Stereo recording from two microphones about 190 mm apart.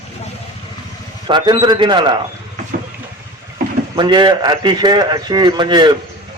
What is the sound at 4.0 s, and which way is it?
Speech, 25° right (ahead or behind).